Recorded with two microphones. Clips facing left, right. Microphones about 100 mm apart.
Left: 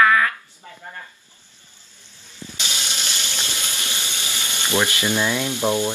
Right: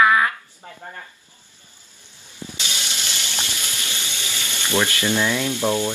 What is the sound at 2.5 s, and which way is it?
Water, 20° left (ahead or behind).